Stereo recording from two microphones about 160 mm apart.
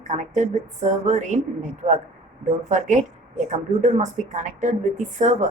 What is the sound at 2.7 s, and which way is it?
Speech, 50° right (ahead or behind).